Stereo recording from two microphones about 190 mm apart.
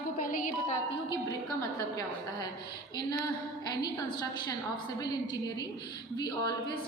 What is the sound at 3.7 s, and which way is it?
A woman's voice, 20° left (ahead or behind).